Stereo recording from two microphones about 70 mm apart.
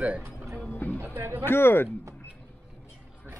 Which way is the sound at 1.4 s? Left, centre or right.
Left.